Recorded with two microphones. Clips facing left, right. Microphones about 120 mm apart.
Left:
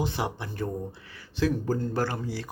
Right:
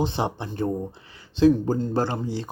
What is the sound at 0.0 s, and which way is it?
Speech, 25° right (ahead or behind).